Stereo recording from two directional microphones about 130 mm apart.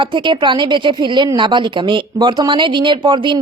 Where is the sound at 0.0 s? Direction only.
40° right (ahead or behind).